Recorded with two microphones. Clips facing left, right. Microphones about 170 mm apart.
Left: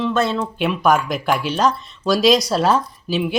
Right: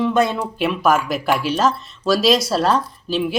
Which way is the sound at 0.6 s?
Centre (ahead or behind).